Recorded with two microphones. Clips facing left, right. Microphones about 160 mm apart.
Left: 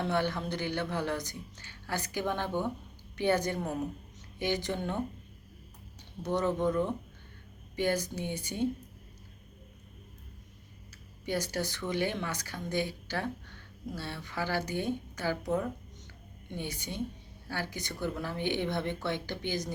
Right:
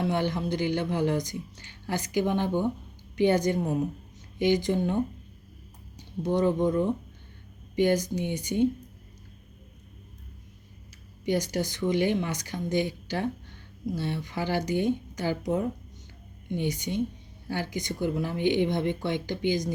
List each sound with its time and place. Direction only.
0.0 s speech: 15° right (ahead or behind)
6.2 s speech: 15° right (ahead or behind)
11.3 s speech: 15° right (ahead or behind)